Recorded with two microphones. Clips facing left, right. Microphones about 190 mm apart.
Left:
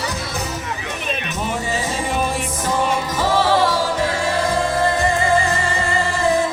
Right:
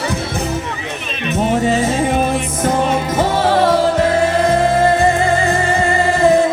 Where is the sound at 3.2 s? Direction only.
60° right (ahead or behind).